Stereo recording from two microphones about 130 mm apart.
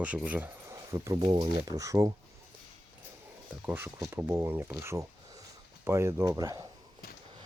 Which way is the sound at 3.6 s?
15° right (ahead or behind).